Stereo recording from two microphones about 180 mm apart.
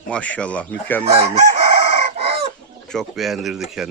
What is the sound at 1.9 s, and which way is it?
Chicken, 35° right (ahead or behind).